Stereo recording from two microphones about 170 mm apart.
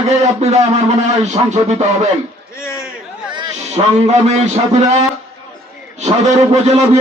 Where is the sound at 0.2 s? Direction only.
40° right (ahead or behind).